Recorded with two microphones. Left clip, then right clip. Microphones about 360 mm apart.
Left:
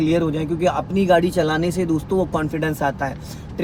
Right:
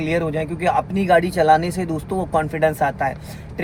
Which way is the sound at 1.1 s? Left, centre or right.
Centre.